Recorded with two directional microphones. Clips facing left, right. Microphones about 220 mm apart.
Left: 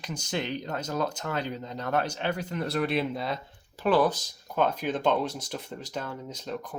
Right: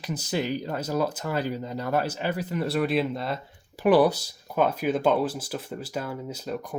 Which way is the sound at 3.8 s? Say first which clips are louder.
Right 4 dB; 15° right (ahead or behind).